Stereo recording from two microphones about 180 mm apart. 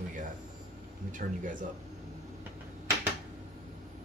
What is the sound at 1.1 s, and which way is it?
Speech, 45° right (ahead or behind).